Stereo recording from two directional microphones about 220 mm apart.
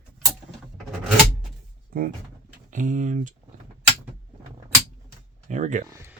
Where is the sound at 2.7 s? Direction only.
35° right (ahead or behind).